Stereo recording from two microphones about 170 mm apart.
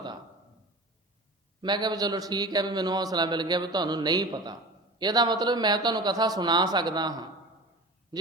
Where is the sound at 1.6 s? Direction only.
25° right (ahead or behind).